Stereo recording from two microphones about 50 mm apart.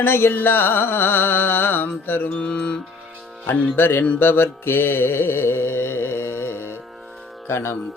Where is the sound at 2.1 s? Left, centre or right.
Left.